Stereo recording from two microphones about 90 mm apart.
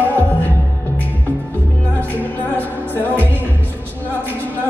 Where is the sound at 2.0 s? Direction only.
20° left (ahead or behind).